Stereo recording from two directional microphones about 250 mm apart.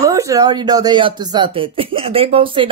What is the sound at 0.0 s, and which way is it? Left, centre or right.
Speech, centre.